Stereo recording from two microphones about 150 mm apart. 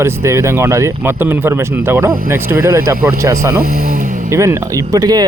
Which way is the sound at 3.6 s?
80° right.